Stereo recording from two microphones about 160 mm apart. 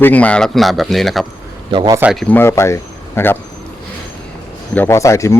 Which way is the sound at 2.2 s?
15° left (ahead or behind).